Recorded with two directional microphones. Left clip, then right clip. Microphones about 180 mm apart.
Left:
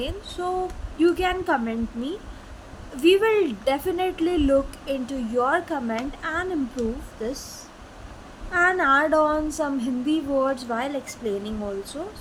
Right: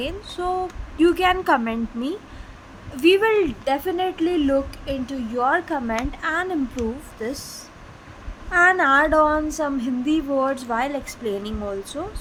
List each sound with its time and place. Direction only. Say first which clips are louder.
0.0 s a woman's voice: right 2 dB; 20° right (ahead or behind)
3.0 s a woman's voice: right 2 dB; 20° right (ahead or behind)